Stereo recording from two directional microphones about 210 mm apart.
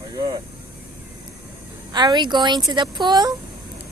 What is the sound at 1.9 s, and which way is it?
A woman's voice, 20° right (ahead or behind).